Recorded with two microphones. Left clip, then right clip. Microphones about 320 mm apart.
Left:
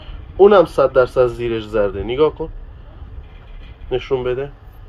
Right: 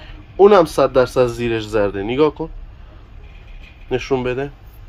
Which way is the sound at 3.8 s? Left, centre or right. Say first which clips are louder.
Even; right.